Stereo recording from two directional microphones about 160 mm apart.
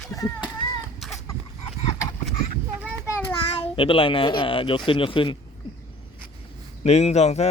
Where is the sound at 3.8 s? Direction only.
35° left (ahead or behind).